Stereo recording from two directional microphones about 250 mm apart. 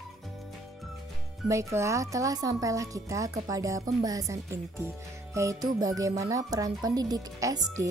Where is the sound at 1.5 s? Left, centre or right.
Centre.